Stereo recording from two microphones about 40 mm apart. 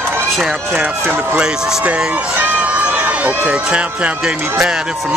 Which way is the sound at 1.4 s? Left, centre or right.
Centre.